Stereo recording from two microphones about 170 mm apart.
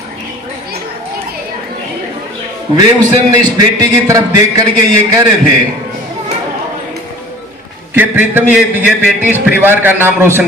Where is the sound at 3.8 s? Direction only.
20° right (ahead or behind).